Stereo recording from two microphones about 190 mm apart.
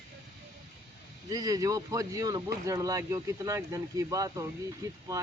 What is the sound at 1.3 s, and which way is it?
Speech, 20° right (ahead or behind).